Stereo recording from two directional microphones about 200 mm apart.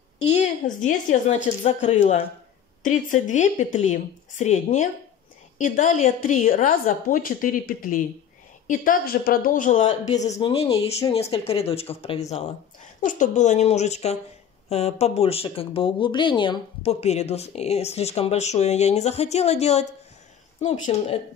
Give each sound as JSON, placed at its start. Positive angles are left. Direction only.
{"t": 0.8, "sound": "speech", "side_deg": 35}